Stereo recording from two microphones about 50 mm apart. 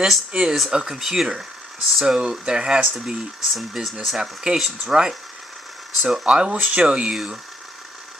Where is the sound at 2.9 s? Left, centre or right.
Centre.